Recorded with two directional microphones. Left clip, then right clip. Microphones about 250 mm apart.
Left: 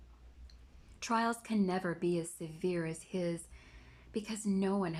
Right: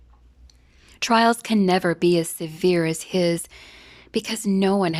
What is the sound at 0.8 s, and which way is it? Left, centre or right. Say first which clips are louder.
A woman's voice: right 15 dB; right.